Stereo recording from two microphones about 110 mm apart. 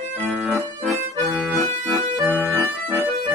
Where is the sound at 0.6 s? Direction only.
Centre (ahead or behind).